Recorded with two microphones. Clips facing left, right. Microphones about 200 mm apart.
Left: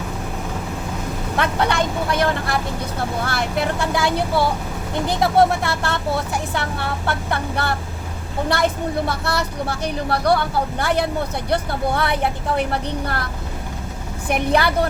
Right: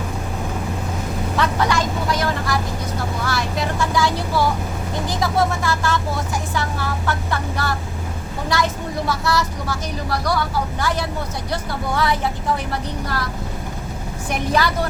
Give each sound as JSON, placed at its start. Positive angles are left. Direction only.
{"t": 1.4, "sound": "vehicle", "side_deg": 60}
{"t": 5.0, "sound": "speech", "side_deg": 60}
{"t": 14.3, "sound": "speech", "side_deg": 60}